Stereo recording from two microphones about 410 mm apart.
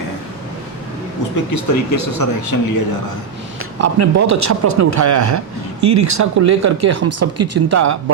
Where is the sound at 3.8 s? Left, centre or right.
Right.